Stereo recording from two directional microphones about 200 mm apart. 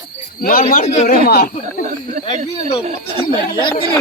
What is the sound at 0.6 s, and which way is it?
Speech, 40° left (ahead or behind).